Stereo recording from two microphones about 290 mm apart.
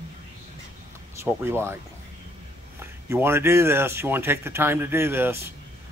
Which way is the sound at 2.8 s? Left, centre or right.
Centre.